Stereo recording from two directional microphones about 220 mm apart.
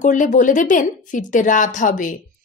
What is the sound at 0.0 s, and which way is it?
A woman's voice, 35° left (ahead or behind).